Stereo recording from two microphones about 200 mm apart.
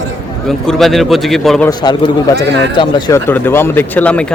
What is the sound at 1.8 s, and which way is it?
Speech, 20° left (ahead or behind).